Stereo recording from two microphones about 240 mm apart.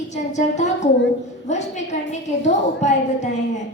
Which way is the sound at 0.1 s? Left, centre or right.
Left.